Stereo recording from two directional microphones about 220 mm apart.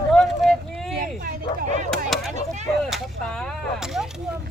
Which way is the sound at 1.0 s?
40° right (ahead or behind).